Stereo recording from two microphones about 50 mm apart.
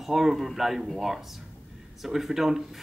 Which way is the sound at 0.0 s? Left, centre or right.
Centre.